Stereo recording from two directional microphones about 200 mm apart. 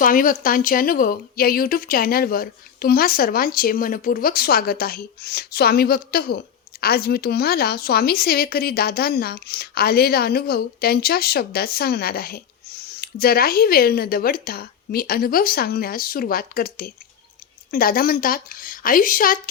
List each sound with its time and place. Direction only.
0.0 s speech: 45° left (ahead or behind)